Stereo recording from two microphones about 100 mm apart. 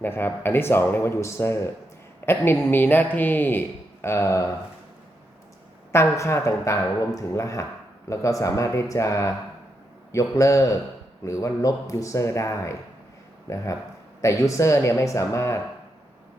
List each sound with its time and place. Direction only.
0.0 s speech: 20° left (ahead or behind)
5.9 s speech: 30° left (ahead or behind)